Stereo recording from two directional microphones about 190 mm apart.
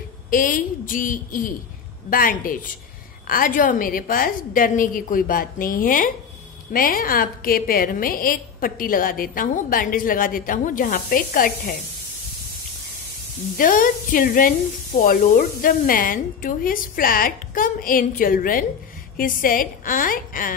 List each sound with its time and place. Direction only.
0.3 s a woman's voice: 45° left (ahead or behind)
13.6 s a woman's voice: 45° left (ahead or behind)